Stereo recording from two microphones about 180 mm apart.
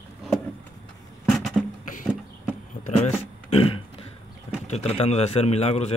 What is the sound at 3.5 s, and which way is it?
Burping, 30° left (ahead or behind).